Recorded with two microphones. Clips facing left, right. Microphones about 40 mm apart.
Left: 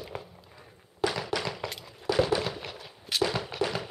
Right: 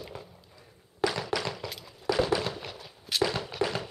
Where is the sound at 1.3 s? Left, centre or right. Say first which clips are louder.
Left 1 dB; centre.